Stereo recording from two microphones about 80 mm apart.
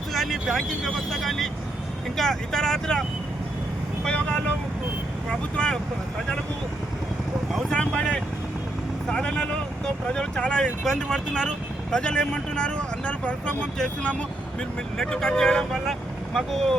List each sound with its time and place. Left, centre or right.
0.1 s vehicle: centre
0.4 s speech: centre
4.0 s vehicle: centre
5.5 s speech: centre
7.7 s speech: centre